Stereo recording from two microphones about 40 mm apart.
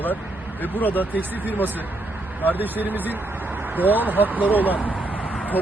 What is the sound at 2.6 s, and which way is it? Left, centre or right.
Speech, right.